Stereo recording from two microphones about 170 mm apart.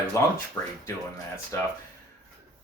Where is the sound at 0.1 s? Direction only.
15° left (ahead or behind).